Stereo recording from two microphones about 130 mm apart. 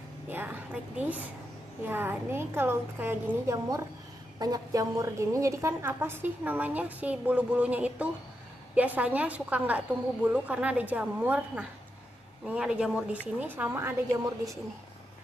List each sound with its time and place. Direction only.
0.3 s a sound: 15° right (ahead or behind)
1.9 s a woman's voice: 15° right (ahead or behind)
4.4 s a woman's voice: 30° right (ahead or behind)